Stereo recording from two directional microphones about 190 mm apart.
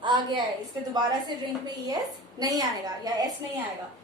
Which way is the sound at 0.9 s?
20° right (ahead or behind).